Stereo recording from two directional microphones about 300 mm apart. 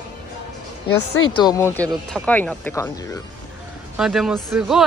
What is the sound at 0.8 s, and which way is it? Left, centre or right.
Speech, left.